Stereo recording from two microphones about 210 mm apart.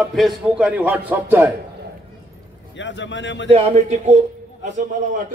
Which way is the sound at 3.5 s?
30° right (ahead or behind).